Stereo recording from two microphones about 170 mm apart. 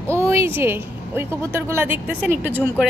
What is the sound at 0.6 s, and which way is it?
A woman's voice, 15° right (ahead or behind).